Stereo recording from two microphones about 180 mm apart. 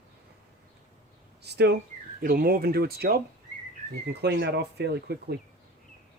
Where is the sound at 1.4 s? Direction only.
65° right (ahead or behind).